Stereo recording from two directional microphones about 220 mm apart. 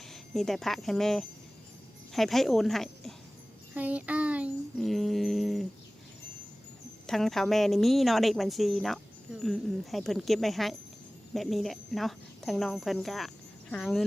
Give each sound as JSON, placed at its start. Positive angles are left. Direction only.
{"t": 0.1, "sound": "a woman's voice", "side_deg": 0}
{"t": 7.1, "sound": "speech", "side_deg": 0}